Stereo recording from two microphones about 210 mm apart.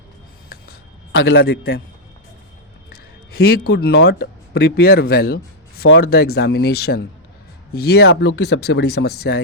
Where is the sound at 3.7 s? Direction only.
50° left (ahead or behind).